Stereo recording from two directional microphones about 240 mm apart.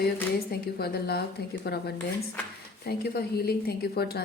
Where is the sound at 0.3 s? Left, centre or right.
Left.